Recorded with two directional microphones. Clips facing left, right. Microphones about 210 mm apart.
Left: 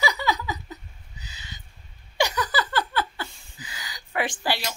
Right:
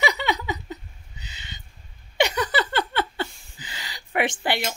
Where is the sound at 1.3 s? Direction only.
25° right (ahead or behind).